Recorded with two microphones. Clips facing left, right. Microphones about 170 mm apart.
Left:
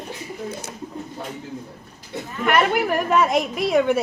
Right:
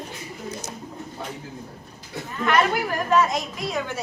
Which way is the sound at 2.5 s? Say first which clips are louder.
Left 3 dB; 60° left (ahead or behind).